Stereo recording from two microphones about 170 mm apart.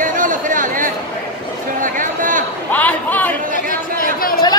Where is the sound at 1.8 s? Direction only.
50° right (ahead or behind).